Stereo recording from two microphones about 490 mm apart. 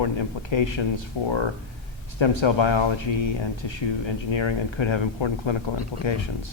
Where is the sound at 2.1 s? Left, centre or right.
Left.